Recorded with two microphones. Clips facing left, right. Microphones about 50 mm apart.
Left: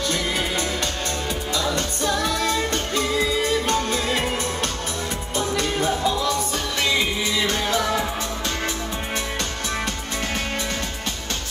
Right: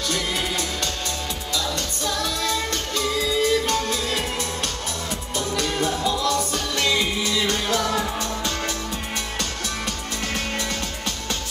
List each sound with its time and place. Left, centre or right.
0.1 s music: left
5.4 s music: centre